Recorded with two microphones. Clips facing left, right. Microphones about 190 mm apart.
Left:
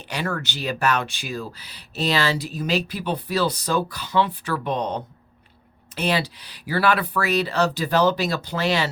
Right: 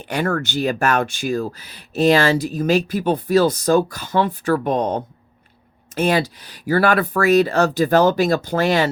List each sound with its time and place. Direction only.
0.0 s speech: 50° right (ahead or behind)